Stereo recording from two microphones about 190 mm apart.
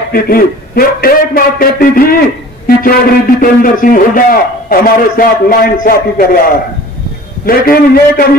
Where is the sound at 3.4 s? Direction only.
45° left (ahead or behind).